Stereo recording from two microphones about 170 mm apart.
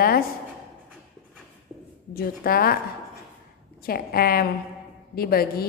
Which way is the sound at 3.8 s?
60° left (ahead or behind).